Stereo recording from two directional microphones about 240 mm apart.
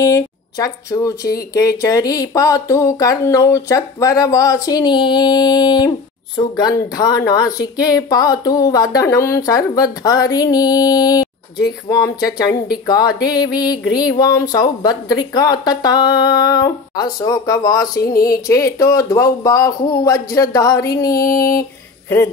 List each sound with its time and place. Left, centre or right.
0.0 s speech: centre